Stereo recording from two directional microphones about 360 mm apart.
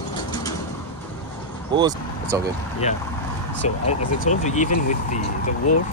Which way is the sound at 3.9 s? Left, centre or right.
Centre.